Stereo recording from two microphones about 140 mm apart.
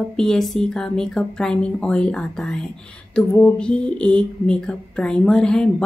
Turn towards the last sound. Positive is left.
turn(degrees=5)  # may be behind; listen again after turning